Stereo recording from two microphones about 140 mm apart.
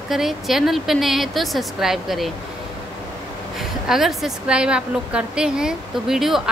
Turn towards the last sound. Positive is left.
turn(degrees=0)  # may be behind; listen again after turning